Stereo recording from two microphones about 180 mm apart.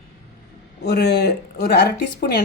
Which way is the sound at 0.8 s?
70° left (ahead or behind).